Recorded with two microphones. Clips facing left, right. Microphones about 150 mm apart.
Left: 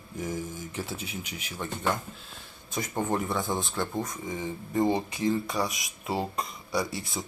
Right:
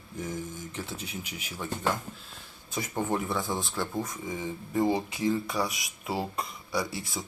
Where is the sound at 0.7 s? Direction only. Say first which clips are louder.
Left 3 dB; 5° left (ahead or behind).